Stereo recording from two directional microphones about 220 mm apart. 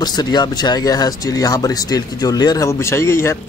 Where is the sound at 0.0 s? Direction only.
20° left (ahead or behind).